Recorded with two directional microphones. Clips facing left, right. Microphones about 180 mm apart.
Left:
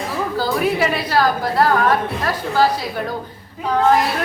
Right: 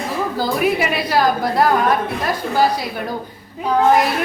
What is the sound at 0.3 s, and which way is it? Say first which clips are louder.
A woman's voice: even; 15° right (ahead or behind).